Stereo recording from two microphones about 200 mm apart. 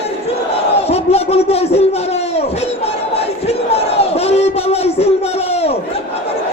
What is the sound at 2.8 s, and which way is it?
Battle cry, 30° left (ahead or behind).